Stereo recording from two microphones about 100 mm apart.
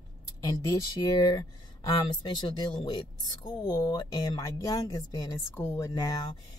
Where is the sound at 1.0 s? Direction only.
45° left (ahead or behind).